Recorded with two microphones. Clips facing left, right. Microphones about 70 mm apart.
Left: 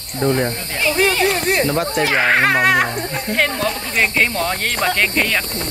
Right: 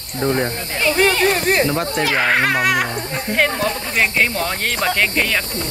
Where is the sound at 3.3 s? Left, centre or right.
Centre.